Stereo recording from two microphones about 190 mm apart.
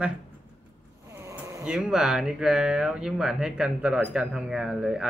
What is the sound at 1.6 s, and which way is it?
A man's voice, 5° right (ahead or behind).